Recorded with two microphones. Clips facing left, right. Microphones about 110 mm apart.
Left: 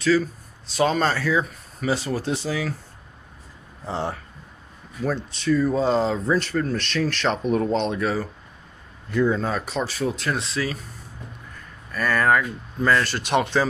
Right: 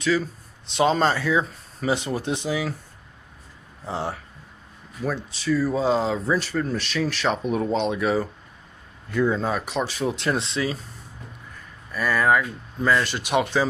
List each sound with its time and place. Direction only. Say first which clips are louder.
0.7 s speech: right 1 dB; 25° right (ahead or behind)
3.8 s speech: left 1 dB; 5° right (ahead or behind)
9.4 s speech: even; 10° right (ahead or behind); by 10.8 s 25° right (ahead or behind)
11.9 s speech: even; 10° right (ahead or behind)